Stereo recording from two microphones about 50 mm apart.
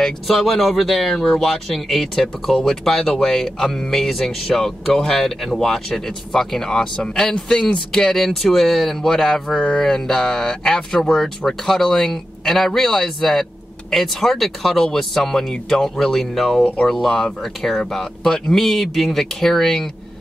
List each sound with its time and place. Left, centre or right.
0.0 s speech: centre
4.6 s speech: centre
9.6 s a sound: left
9.8 s speech: centre